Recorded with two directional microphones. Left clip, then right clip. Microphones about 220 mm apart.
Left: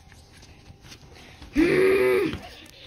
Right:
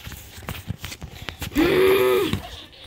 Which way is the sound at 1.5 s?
15° left (ahead or behind).